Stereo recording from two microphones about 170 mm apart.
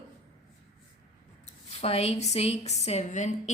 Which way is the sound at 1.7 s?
40° left (ahead or behind).